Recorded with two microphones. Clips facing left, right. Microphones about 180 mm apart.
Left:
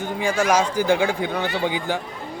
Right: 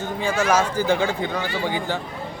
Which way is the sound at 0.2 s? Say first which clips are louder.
Left 1 dB; 10° left (ahead or behind).